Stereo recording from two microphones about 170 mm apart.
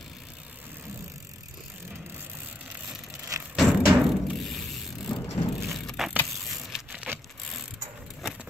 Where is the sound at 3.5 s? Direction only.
Centre (ahead or behind).